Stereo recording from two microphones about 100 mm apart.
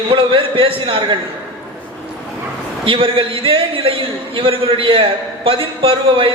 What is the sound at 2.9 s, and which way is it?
A man's voice, 60° right (ahead or behind).